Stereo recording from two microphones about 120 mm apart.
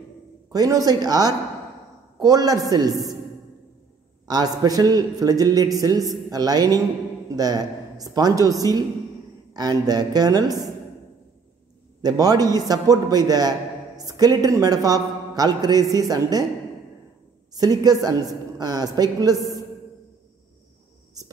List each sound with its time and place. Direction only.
0.5 s a man's voice: 30° right (ahead or behind)
4.3 s a man's voice: 30° right (ahead or behind)
12.0 s a man's voice: 30° right (ahead or behind)
17.6 s a man's voice: 30° right (ahead or behind)